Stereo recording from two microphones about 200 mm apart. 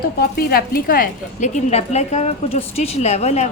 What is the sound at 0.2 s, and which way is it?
A woman's voice, 50° left (ahead or behind).